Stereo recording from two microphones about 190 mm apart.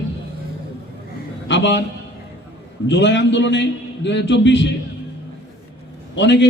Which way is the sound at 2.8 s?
70° left (ahead or behind).